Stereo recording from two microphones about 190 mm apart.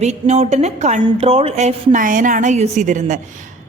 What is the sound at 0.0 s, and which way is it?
A woman's voice, 35° right (ahead or behind).